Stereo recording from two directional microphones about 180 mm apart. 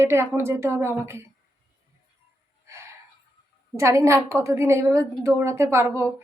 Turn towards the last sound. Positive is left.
turn(degrees=-15)  # may be behind; listen again after turning